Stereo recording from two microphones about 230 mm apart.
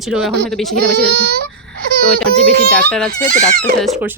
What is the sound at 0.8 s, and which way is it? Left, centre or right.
Speech, right.